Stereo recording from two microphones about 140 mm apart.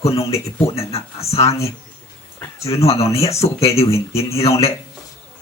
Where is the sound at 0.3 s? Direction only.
20° left (ahead or behind).